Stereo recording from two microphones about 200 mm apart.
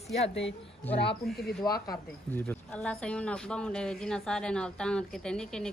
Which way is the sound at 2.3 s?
5° left (ahead or behind).